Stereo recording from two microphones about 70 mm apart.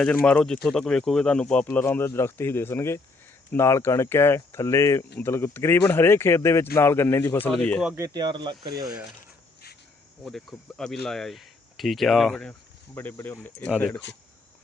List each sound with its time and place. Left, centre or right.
0.3 s speech: centre
1.7 s speech: left
8.1 s speech: right
10.2 s speech: centre
13.2 s speech: left